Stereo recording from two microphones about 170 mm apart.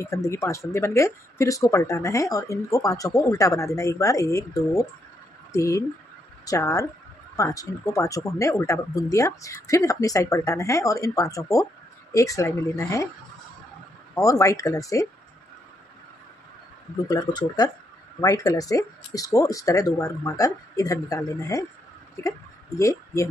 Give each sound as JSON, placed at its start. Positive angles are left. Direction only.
{"t": 0.0, "sound": "speech", "side_deg": 15}
{"t": 14.1, "sound": "speech", "side_deg": 20}
{"t": 17.1, "sound": "speech", "side_deg": 25}